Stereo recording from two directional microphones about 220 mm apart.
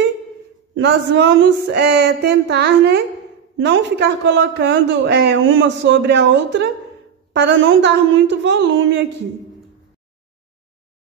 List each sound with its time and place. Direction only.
0.7 s a man's voice: 50° right (ahead or behind)